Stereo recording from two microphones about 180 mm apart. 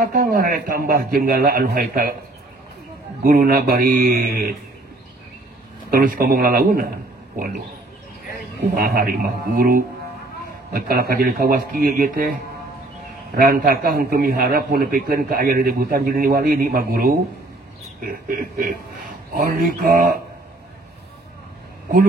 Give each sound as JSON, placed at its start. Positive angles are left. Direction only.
{"t": 0.0, "sound": "a man's voice", "side_deg": -50}
{"t": 3.3, "sound": "speech", "side_deg": -55}
{"t": 5.9, "sound": "a man's voice", "side_deg": -55}
{"t": 8.7, "sound": "a man's voice", "side_deg": -55}
{"t": 13.4, "sound": "a man's voice", "side_deg": -55}